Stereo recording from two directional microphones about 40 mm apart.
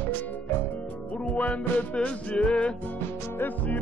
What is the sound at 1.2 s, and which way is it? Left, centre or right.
Music, left.